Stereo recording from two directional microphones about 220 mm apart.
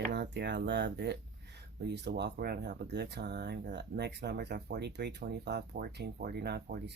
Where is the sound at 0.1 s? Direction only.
50° right (ahead or behind).